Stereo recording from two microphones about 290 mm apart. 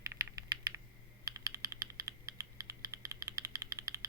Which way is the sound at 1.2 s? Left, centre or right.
Centre.